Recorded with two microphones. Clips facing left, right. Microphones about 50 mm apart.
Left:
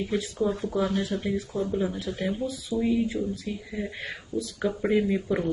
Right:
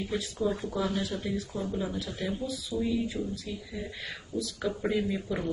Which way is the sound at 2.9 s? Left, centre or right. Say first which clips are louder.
Left 5 dB; left.